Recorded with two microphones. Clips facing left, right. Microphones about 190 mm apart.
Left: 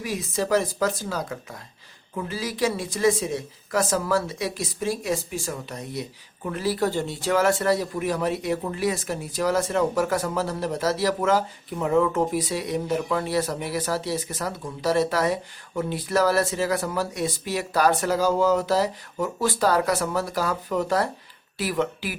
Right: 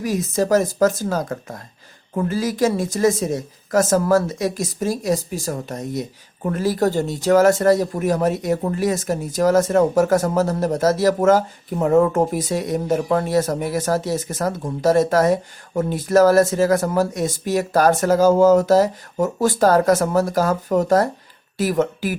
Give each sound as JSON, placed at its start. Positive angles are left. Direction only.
{"t": 0.0, "sound": "speech", "side_deg": -45}